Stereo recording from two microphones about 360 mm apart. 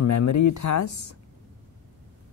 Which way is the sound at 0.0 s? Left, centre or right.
Left.